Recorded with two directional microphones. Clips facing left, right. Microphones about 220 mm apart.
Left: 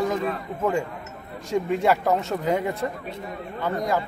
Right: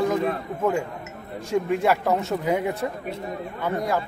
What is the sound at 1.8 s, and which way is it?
Speech, 5° right (ahead or behind).